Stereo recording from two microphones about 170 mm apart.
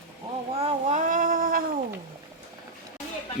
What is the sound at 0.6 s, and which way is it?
Child singing, 45° right (ahead or behind).